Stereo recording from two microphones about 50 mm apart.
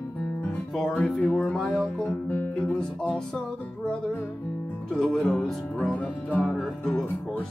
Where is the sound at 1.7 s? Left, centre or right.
Centre.